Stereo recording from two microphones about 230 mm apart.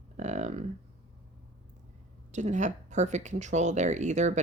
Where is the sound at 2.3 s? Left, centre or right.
Right.